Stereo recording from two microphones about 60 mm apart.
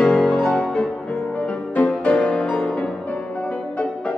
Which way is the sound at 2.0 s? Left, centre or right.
Left.